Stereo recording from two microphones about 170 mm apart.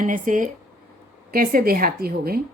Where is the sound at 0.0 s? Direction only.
50° right (ahead or behind).